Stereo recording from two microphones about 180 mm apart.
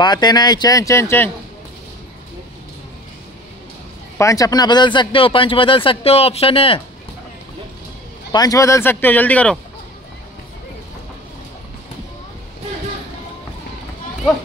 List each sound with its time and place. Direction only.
0.0 s speech: 25° left (ahead or behind)
4.2 s speech: 20° left (ahead or behind)
8.3 s speech: 20° left (ahead or behind)